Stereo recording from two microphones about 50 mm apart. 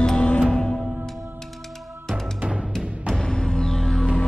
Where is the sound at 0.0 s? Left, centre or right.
Centre.